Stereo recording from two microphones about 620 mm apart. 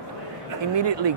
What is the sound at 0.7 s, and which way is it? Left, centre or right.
Speech, right.